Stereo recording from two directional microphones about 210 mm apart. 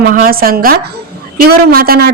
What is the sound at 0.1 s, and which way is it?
A woman's voice, 45° right (ahead or behind).